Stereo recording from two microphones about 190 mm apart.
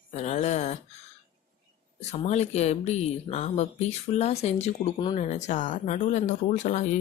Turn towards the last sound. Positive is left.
turn(degrees=40)  # may be behind; listen again after turning